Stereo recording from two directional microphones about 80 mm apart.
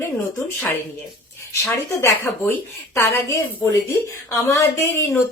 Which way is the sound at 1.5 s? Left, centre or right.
Left.